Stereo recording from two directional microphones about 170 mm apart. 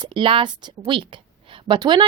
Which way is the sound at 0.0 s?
30° right (ahead or behind).